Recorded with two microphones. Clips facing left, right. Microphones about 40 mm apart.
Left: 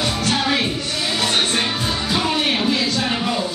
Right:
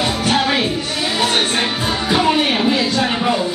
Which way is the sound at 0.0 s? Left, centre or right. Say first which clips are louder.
Right 3 dB; centre.